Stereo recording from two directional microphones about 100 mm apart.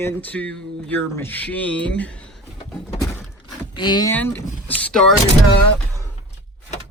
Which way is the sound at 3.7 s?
50° left (ahead or behind).